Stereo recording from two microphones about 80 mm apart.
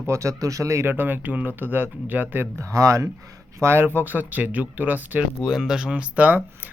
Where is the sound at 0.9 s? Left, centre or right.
Right.